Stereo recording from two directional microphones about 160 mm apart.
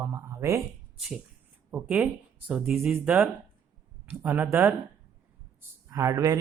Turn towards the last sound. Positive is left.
turn(degrees=-20)  # may be behind; listen again after turning